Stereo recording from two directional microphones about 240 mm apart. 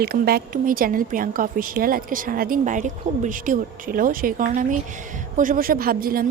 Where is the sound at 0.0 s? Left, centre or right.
Right.